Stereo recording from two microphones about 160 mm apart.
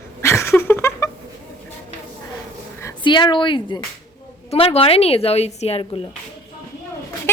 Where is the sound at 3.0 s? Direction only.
30° left (ahead or behind).